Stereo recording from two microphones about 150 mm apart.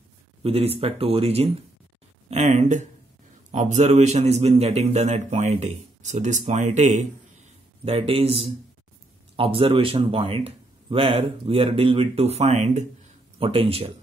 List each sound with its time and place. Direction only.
0.4 s a man's voice: 40° right (ahead or behind)